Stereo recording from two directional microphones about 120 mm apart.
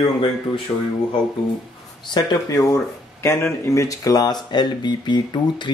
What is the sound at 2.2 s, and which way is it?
Speech, 35° left (ahead or behind).